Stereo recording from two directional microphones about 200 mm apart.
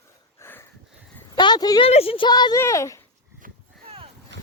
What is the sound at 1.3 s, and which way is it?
Speech, 20° left (ahead or behind).